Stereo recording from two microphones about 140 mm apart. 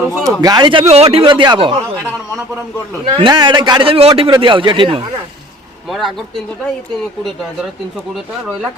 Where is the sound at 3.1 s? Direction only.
35° right (ahead or behind).